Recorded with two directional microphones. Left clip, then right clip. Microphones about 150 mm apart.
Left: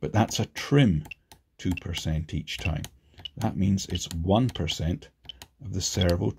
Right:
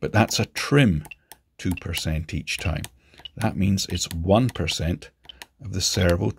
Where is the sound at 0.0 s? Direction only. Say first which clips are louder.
Right 5 dB; 30° right (ahead or behind).